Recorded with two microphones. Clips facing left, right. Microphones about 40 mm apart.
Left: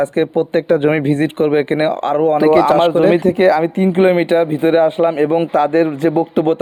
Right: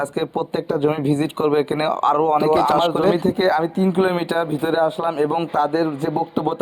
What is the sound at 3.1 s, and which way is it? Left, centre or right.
Speech, left.